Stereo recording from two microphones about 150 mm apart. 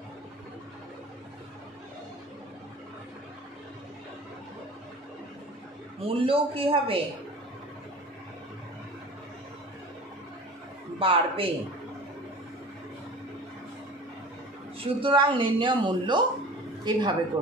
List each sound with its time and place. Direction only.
5.9 s speech: 40° right (ahead or behind)
11.0 s speech: 35° right (ahead or behind)
14.8 s a woman's voice: 35° right (ahead or behind)